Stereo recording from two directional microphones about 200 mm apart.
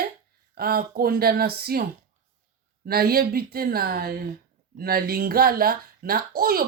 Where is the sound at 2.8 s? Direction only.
50° right (ahead or behind).